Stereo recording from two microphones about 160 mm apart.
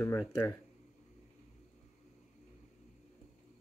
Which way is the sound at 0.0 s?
15° left (ahead or behind).